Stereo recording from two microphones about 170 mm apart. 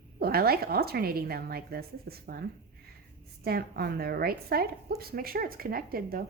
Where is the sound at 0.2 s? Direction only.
65° right (ahead or behind).